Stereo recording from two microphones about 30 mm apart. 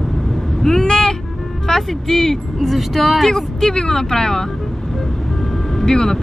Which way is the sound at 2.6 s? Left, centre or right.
Centre.